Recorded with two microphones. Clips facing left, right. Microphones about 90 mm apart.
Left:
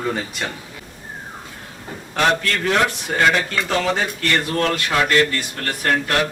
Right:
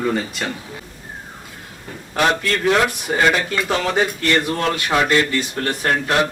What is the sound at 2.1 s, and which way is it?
A man's voice, 5° right (ahead or behind).